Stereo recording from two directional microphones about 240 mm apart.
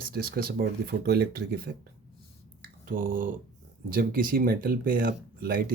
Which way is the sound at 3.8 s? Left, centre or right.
Right.